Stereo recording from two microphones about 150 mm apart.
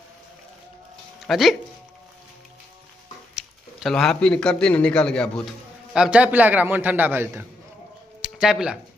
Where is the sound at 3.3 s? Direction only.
Centre (ahead or behind).